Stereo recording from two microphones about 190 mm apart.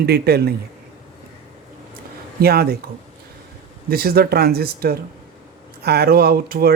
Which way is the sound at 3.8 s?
55° right (ahead or behind).